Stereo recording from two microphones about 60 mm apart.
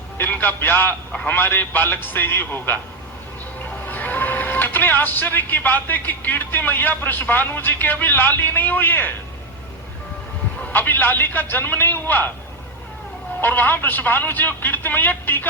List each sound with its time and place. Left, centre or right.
0.2 s a man's voice: left
3.8 s speech: left
10.6 s a man's voice: left
13.4 s a man's voice: left